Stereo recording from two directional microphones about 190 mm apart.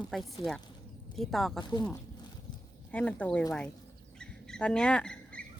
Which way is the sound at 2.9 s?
5° left (ahead or behind).